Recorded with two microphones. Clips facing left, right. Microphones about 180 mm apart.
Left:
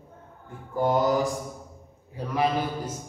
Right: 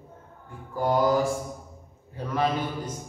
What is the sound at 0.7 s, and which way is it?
Mantra, 20° left (ahead or behind).